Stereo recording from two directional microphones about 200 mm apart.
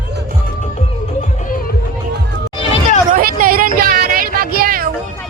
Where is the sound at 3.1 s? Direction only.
45° right (ahead or behind).